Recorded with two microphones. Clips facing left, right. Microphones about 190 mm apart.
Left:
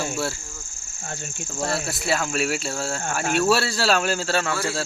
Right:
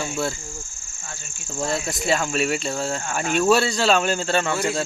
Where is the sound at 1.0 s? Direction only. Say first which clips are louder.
Left 7 dB; 60° left (ahead or behind).